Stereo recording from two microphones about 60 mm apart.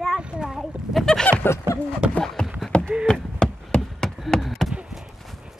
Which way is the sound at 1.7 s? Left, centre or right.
Right.